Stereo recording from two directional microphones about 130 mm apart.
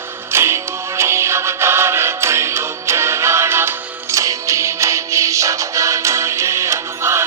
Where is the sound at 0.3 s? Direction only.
20° right (ahead or behind).